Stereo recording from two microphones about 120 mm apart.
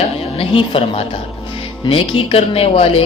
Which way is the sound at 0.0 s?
50° left (ahead or behind).